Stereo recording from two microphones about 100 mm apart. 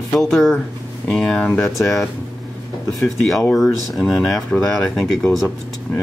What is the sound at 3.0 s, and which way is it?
Speech, centre (ahead or behind).